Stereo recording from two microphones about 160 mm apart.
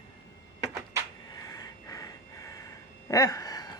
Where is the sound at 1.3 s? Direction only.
20° left (ahead or behind).